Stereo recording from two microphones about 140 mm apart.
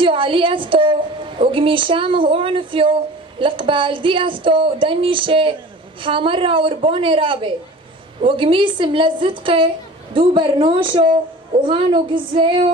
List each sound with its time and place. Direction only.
0.0 s speech: 40° right (ahead or behind)